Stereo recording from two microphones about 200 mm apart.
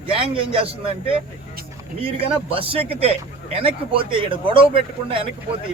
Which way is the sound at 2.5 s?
25° right (ahead or behind).